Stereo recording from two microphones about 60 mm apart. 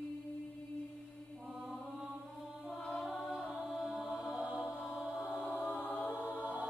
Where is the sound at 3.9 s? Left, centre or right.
Centre.